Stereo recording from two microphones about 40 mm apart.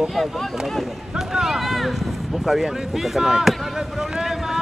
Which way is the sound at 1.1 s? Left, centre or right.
Centre.